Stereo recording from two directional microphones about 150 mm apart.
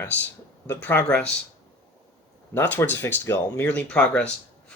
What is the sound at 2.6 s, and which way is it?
Speech, 15° left (ahead or behind).